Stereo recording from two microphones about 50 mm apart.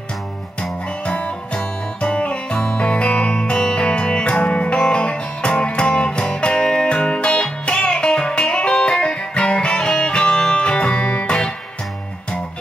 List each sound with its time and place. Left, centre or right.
0.6 s music: left